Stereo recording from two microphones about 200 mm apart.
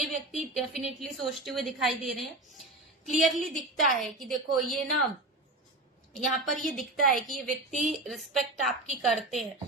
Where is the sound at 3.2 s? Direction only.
Centre (ahead or behind).